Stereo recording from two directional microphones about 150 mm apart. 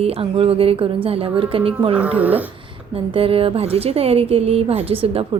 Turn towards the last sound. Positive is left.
turn(degrees=-40)  # may be behind; listen again after turning